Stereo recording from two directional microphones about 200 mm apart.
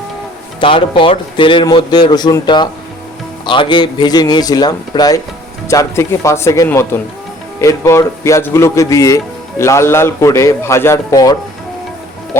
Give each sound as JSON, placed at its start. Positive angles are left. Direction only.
{"t": 0.6, "sound": "a man's voice", "side_deg": 25}